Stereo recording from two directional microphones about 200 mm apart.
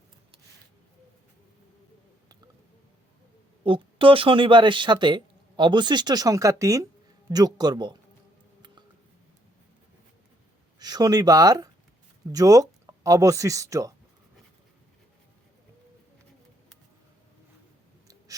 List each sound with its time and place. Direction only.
3.6 s speech: 25° right (ahead or behind)
10.8 s speech: 20° right (ahead or behind)